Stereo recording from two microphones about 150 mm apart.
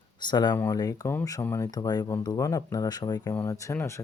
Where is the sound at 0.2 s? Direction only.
30° left (ahead or behind).